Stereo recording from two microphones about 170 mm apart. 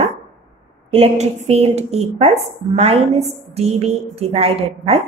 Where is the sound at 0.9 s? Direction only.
40° right (ahead or behind).